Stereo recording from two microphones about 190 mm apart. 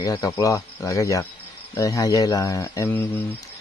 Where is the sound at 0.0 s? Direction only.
20° left (ahead or behind).